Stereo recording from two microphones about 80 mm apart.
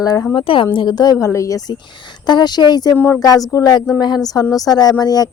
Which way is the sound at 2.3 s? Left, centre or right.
Left.